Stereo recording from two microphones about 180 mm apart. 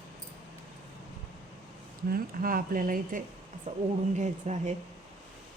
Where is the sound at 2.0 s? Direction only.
55° right (ahead or behind).